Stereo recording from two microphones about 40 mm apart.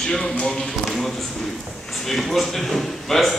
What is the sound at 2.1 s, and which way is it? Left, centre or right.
Speech, centre.